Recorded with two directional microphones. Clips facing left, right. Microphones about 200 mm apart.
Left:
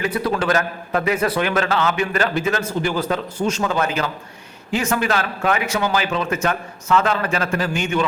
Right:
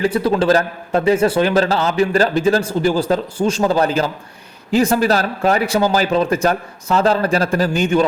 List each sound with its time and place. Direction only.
0.0 s a man's voice: 30° right (ahead or behind)